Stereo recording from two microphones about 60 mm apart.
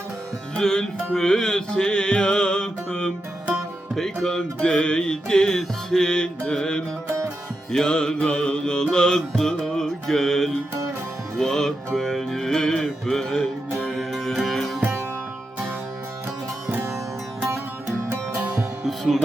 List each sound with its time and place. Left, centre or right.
0.5 s music: centre
16.6 s music: right
18.9 s music: centre